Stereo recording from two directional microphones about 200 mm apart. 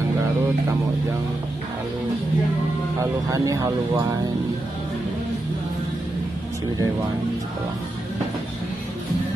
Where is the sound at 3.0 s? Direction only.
15° right (ahead or behind).